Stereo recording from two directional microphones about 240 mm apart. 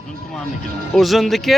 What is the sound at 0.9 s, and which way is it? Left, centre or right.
Speech, centre.